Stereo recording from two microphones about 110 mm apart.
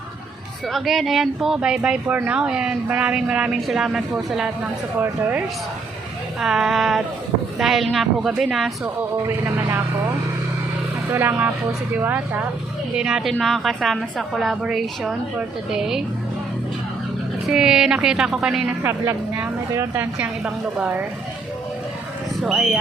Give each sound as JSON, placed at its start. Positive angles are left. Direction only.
{"t": 0.7, "sound": "speech", "side_deg": 0}
{"t": 6.4, "sound": "a woman's voice", "side_deg": -5}
{"t": 9.2, "sound": "speech", "side_deg": -25}
{"t": 11.1, "sound": "speech", "side_deg": -20}
{"t": 13.0, "sound": "a woman's voice", "side_deg": -5}
{"t": 17.5, "sound": "a woman's voice", "side_deg": -5}
{"t": 18.8, "sound": "speech", "side_deg": -25}
{"t": 19.9, "sound": "speech", "side_deg": -15}
{"t": 22.4, "sound": "a woman's voice", "side_deg": -5}